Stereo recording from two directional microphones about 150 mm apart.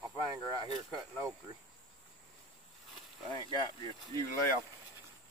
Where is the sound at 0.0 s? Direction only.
25° right (ahead or behind).